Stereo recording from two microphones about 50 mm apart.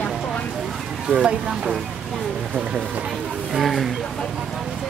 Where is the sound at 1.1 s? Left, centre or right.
Centre.